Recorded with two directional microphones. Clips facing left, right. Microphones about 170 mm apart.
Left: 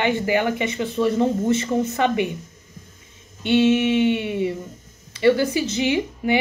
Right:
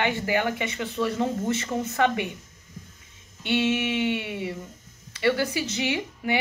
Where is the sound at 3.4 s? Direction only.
20° left (ahead or behind).